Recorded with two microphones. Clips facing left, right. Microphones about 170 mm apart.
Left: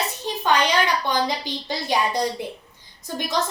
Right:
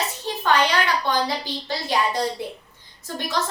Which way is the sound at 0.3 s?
15° left (ahead or behind).